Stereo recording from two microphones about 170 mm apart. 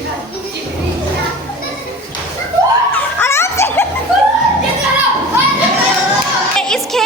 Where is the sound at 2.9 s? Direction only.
15° left (ahead or behind).